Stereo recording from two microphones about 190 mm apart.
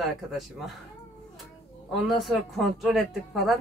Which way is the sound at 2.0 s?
Centre (ahead or behind).